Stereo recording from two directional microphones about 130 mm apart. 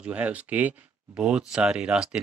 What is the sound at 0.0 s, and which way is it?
Speech, 10° right (ahead or behind).